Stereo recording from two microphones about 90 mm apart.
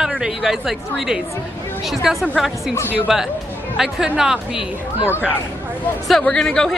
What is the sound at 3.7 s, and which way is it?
Speech, 5° right (ahead or behind).